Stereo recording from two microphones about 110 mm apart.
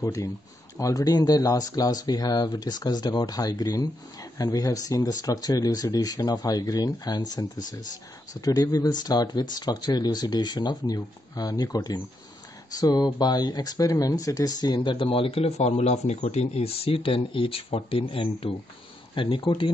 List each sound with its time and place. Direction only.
0.0 s speech: 30° left (ahead or behind); by 15.0 s 45° left (ahead or behind)
15.0 s speech: 60° left (ahead or behind)